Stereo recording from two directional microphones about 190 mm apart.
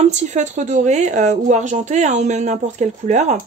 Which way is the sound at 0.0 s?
35° right (ahead or behind).